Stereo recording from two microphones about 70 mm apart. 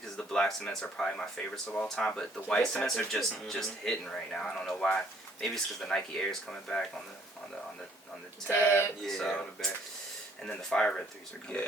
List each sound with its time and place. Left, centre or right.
0.2 s speech: centre
1.1 s speech: left
2.0 s speech: centre
8.5 s a sound: left
9.0 s speech: centre